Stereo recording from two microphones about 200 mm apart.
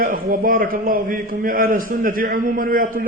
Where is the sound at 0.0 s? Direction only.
45° right (ahead or behind).